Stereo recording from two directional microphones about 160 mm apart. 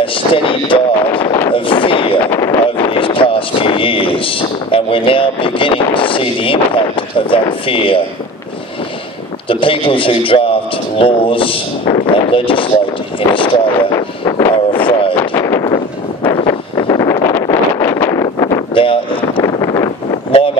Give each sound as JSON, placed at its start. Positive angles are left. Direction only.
{"t": 0.0, "sound": "a sound", "side_deg": 35}
{"t": 2.3, "sound": "vehicle", "side_deg": 20}
{"t": 2.6, "sound": "speech", "side_deg": 35}
{"t": 9.5, "sound": "a man's voice", "side_deg": 35}
{"t": 15.0, "sound": "a sound", "side_deg": 35}
{"t": 15.3, "sound": "wind noise", "side_deg": 20}